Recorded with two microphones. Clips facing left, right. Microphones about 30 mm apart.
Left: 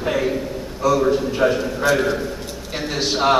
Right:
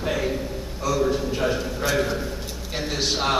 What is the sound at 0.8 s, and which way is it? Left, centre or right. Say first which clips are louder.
A man's voice: left 6 dB; centre.